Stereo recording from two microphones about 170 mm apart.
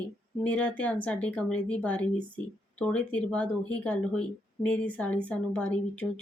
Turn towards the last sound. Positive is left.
turn(degrees=5)  # may be behind; listen again after turning